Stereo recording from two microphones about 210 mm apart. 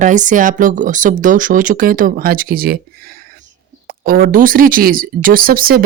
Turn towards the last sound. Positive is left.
turn(degrees=-45)  # may be behind; listen again after turning